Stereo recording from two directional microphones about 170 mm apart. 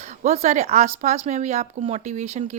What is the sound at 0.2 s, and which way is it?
Speech, 40° right (ahead or behind).